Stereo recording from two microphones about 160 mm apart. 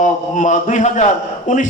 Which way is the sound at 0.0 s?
50° left (ahead or behind).